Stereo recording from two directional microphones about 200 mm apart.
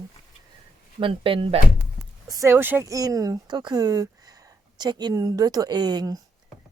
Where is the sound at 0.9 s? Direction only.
25° right (ahead or behind).